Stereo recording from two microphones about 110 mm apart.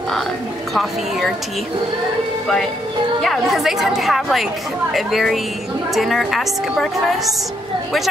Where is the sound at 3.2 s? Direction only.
Centre (ahead or behind).